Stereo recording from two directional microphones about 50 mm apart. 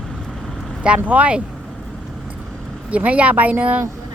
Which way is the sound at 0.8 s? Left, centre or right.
Right.